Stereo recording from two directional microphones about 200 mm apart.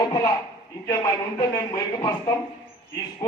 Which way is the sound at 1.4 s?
20° left (ahead or behind).